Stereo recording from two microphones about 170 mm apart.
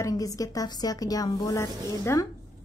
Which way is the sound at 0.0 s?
20° left (ahead or behind).